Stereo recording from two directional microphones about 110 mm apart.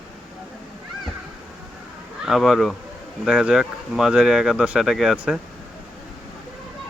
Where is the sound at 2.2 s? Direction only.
5° right (ahead or behind).